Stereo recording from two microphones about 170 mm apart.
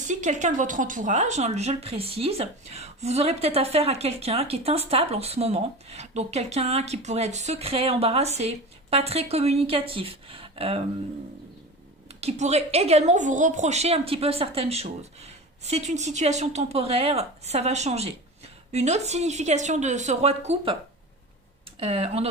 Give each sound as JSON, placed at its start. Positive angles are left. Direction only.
{"t": 0.0, "sound": "speech", "side_deg": -45}
{"t": 12.0, "sound": "speech", "side_deg": -40}
{"t": 21.8, "sound": "speech", "side_deg": -35}